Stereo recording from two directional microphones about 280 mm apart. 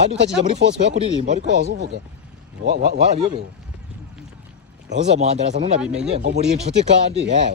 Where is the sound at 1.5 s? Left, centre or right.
Right.